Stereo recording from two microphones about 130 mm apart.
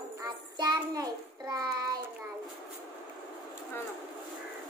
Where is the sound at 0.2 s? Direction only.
30° right (ahead or behind).